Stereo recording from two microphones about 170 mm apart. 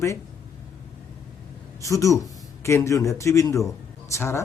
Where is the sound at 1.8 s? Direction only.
20° left (ahead or behind).